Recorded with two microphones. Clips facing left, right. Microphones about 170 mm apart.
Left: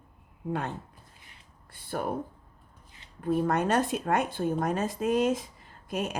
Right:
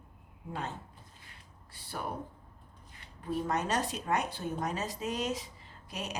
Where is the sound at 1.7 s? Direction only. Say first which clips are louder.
Left 8 dB; 50° left (ahead or behind).